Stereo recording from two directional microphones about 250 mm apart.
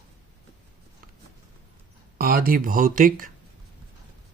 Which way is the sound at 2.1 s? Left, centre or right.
Right.